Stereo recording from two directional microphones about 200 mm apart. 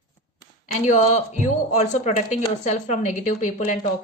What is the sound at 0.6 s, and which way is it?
Speech, 35° left (ahead or behind).